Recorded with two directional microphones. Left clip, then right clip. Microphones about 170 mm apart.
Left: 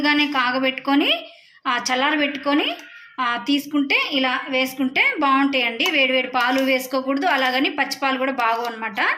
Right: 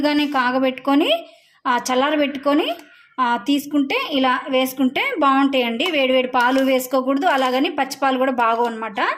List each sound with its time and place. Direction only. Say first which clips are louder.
0.0 s a woman's voice: even; 70° right (ahead or behind)